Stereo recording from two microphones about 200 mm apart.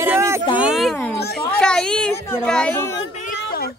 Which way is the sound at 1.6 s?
5° left (ahead or behind).